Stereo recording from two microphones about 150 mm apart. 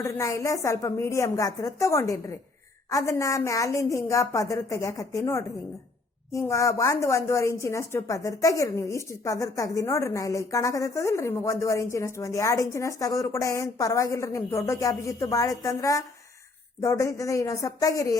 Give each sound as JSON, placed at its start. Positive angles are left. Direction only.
{"t": 0.0, "sound": "a woman's voice", "side_deg": 20}